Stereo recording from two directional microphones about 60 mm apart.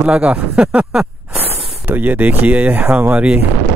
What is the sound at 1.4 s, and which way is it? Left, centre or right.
Speech, right.